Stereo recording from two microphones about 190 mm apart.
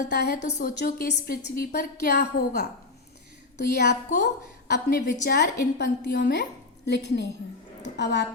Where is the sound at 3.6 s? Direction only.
60° left (ahead or behind).